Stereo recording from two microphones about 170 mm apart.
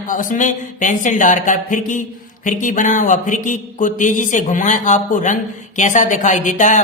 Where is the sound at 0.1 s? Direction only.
50° left (ahead or behind).